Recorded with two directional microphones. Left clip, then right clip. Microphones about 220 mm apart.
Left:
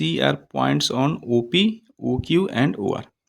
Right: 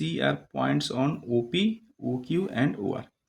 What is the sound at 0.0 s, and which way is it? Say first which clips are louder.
Speech: left 6 dB; 40° left (ahead or behind).